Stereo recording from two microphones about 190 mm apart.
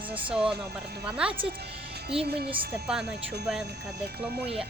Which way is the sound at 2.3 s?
55° right (ahead or behind).